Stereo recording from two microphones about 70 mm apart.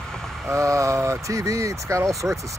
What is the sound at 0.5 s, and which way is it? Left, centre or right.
Speech, right.